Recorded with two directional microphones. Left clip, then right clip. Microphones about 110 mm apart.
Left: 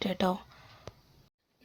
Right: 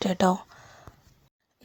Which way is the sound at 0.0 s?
50° right (ahead or behind).